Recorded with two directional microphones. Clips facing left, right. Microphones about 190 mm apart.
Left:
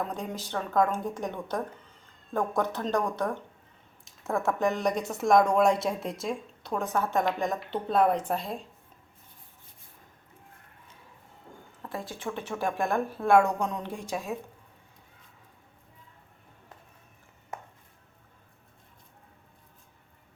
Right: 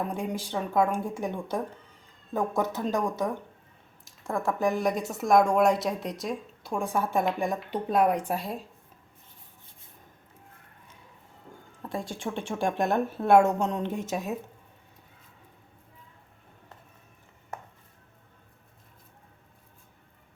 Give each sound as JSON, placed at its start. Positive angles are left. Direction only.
{"t": 0.0, "sound": "speech", "side_deg": -10}
{"t": 4.2, "sound": "speech", "side_deg": 5}
{"t": 4.6, "sound": "a woman's voice", "side_deg": -5}
{"t": 12.2, "sound": "speech", "side_deg": -25}